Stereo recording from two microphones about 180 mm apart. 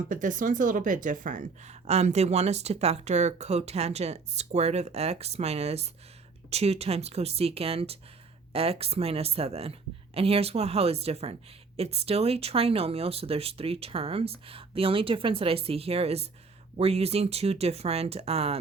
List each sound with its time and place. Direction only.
0.1 s speech: 45° right (ahead or behind)